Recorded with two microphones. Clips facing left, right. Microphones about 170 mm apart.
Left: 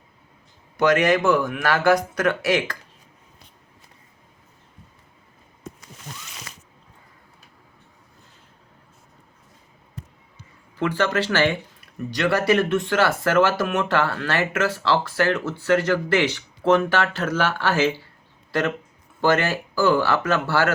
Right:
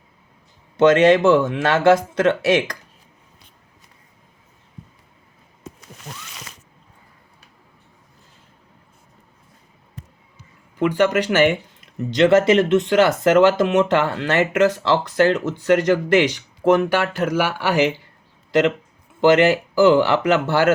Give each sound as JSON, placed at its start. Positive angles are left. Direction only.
{"t": 0.8, "sound": "speech", "side_deg": -25}
{"t": 10.8, "sound": "speech", "side_deg": -15}